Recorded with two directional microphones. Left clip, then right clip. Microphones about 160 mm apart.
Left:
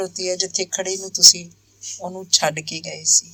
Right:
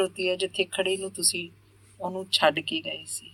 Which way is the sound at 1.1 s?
10° left (ahead or behind).